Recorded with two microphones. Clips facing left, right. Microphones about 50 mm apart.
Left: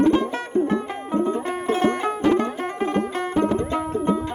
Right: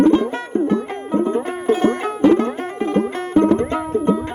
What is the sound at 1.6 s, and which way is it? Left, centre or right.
Music, centre.